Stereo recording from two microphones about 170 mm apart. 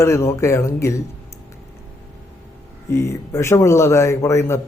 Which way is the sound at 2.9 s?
15° left (ahead or behind).